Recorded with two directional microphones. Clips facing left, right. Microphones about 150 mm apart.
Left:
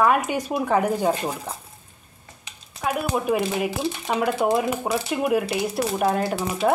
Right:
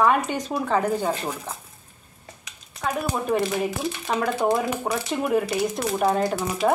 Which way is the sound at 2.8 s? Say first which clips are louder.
Left 2 dB; 10° left (ahead or behind).